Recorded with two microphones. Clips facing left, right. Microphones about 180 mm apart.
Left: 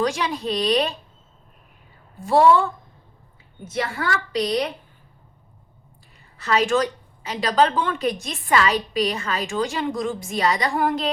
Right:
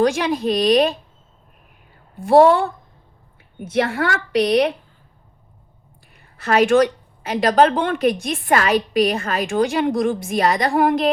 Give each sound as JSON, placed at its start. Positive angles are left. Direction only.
{"t": 0.0, "sound": "a woman's voice", "side_deg": -55}
{"t": 2.2, "sound": "a woman's voice", "side_deg": -60}
{"t": 6.4, "sound": "a woman's voice", "side_deg": -55}